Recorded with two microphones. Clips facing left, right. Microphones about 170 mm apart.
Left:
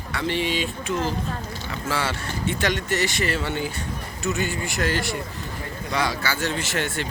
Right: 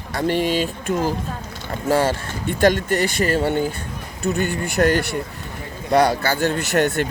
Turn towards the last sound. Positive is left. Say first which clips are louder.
# right 8 dB
turn(degrees=-55)  # may be behind; listen again after turning